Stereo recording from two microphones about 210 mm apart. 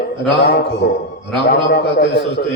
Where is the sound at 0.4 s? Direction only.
50° left (ahead or behind).